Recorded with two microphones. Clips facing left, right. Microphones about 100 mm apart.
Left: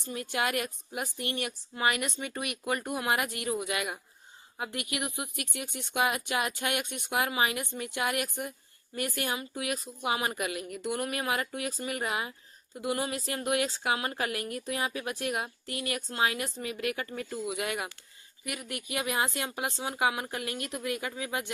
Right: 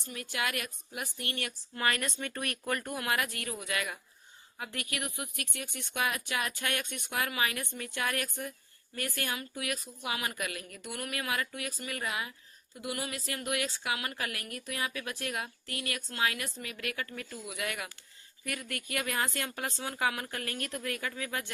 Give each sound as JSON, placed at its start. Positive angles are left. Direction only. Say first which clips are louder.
{"t": 0.1, "sound": "speech", "louder": "left 4 dB", "side_deg": 25}